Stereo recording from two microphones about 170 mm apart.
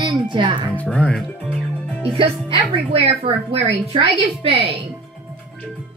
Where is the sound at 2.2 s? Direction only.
30° right (ahead or behind).